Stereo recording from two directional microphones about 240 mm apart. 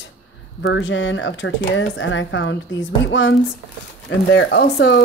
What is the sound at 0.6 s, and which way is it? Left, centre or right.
Speech, left.